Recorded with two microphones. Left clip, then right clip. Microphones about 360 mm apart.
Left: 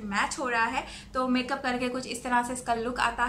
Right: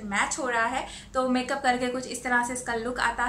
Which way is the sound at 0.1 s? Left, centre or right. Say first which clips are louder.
Right 1 dB; centre.